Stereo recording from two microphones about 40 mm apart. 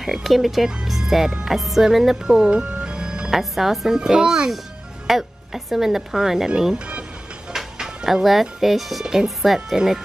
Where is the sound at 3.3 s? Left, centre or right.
Centre.